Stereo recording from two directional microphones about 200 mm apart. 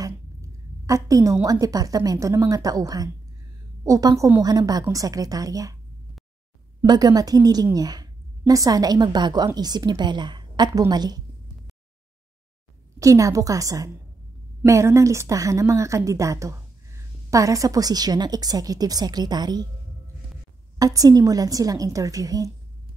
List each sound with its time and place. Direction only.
0.0 s a woman's voice: 15° right (ahead or behind)
6.8 s a woman's voice: 20° right (ahead or behind)
13.0 s a woman's voice: 15° right (ahead or behind)
20.8 s a woman's voice: 20° right (ahead or behind)